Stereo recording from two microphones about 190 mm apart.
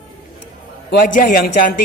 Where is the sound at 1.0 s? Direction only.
45° left (ahead or behind).